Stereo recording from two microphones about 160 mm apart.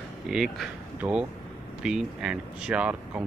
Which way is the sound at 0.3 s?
5° right (ahead or behind).